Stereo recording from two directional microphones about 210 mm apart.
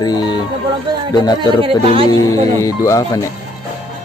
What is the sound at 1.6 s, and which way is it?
Speech, 25° right (ahead or behind).